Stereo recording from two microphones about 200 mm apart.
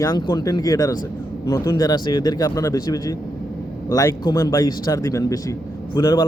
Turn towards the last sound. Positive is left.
turn(degrees=15)  # may be behind; listen again after turning